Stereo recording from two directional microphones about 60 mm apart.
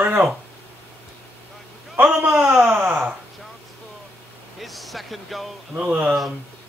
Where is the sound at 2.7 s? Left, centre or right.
Centre.